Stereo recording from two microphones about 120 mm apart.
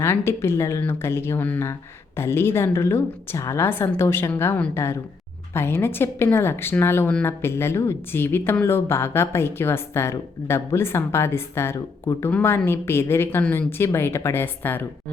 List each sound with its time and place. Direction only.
0.0 s a woman's voice: 20° left (ahead or behind)